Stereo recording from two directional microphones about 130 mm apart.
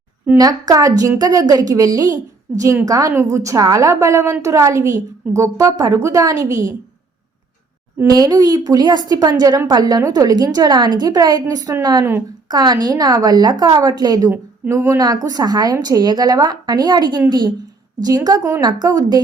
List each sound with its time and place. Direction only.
0.3 s a woman's voice: 30° right (ahead or behind)
2.5 s a woman's voice: 10° right (ahead or behind)
2.8 s a woman's voice: 25° right (ahead or behind)
8.1 s a woman's voice: 30° right (ahead or behind)